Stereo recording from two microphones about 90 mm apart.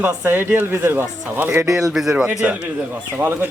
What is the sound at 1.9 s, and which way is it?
Speech, 5° right (ahead or behind).